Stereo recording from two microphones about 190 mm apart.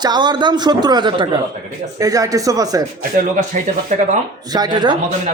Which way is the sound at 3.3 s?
40° right (ahead or behind).